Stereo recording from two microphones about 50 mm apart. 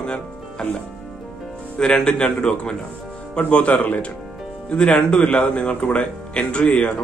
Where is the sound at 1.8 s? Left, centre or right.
Centre.